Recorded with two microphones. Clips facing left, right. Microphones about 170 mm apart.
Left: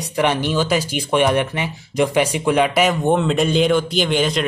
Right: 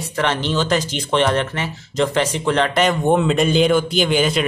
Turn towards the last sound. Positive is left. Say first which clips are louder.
# right 1 dB
turn(degrees=0)  # may be behind; listen again after turning